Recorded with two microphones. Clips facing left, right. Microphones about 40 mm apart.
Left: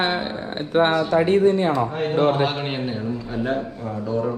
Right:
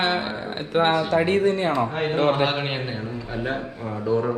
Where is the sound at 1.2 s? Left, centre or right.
Right.